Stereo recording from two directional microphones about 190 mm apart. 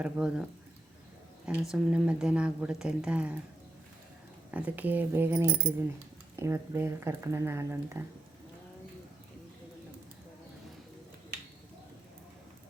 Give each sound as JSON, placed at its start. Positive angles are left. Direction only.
{"t": 0.0, "sound": "a woman's voice", "side_deg": -5}
{"t": 1.7, "sound": "a woman's voice", "side_deg": -5}
{"t": 4.5, "sound": "speech", "side_deg": -10}